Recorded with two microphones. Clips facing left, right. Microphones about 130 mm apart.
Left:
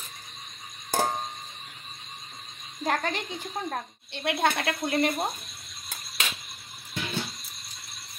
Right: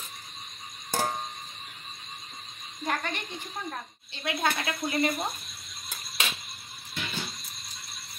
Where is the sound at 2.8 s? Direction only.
90° left.